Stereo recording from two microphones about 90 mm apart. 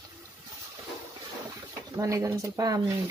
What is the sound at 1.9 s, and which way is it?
Speech, 40° right (ahead or behind).